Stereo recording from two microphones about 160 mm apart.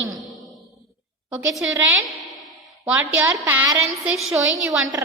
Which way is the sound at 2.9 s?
15° right (ahead or behind).